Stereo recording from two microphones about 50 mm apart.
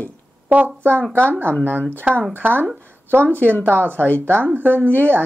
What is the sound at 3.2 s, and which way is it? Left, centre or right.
Speech, left.